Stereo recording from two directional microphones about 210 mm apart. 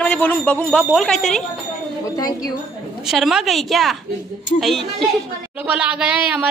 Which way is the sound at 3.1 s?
Centre (ahead or behind).